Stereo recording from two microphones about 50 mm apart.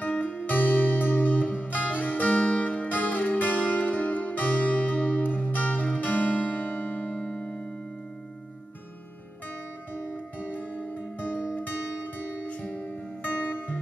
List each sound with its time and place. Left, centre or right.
0.0 s music: left
9.9 s music: left
12.4 s music: left
12.8 s music: left